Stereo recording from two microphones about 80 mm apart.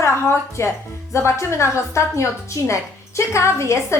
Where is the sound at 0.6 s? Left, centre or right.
Left.